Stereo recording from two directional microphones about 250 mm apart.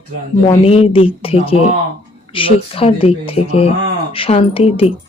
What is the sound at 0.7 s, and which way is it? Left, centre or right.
Speech, left.